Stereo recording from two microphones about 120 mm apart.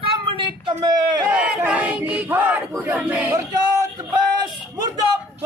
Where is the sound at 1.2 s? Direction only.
10° right (ahead or behind).